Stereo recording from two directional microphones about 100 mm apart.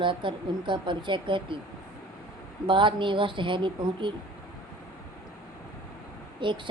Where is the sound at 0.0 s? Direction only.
55° right (ahead or behind).